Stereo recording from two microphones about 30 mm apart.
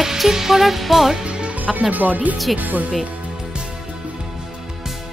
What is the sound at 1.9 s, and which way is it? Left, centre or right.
Speech, right.